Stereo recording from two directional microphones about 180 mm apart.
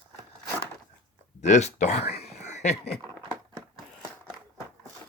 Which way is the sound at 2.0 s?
60° left (ahead or behind).